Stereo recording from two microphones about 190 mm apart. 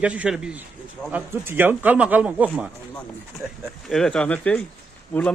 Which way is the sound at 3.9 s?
5° left (ahead or behind).